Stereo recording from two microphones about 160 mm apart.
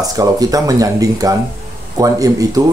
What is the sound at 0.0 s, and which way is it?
Speech, 20° right (ahead or behind).